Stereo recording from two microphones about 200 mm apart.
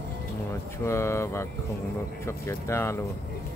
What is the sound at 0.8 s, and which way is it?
Speech, 15° left (ahead or behind).